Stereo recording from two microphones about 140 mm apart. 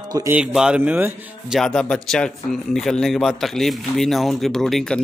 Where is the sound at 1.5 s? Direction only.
5° left (ahead or behind).